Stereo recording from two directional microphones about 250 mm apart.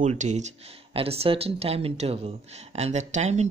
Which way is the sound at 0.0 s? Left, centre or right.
Right.